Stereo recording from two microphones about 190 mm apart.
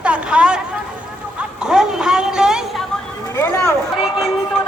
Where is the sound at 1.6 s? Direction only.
5° right (ahead or behind).